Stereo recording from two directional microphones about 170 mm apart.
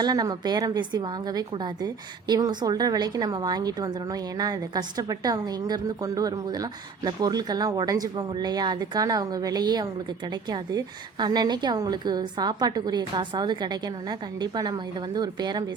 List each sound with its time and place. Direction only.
0.0 s a woman's voice: 20° right (ahead or behind)